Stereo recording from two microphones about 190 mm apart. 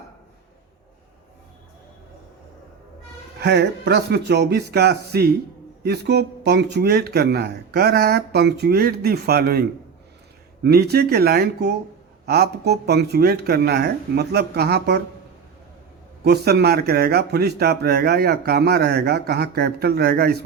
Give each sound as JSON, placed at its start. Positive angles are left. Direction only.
{"t": 3.4, "sound": "speech", "side_deg": -60}
{"t": 16.2, "sound": "speech", "side_deg": -55}